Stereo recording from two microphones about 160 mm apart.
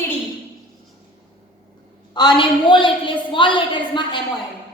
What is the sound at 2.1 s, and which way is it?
A woman's voice, 30° left (ahead or behind).